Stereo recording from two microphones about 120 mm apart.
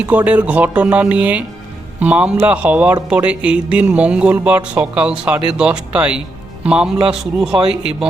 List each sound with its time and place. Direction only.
0.0 s a man's voice: 10° right (ahead or behind)